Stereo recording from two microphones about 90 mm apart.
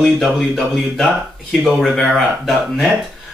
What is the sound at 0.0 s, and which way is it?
Speech, centre (ahead or behind).